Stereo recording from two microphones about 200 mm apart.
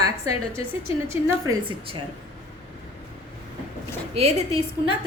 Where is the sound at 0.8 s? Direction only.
15° right (ahead or behind).